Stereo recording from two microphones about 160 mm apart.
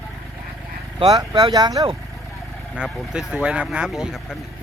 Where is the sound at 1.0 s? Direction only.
30° right (ahead or behind).